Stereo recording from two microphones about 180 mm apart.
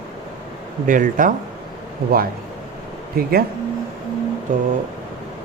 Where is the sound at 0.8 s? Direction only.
50° right (ahead or behind).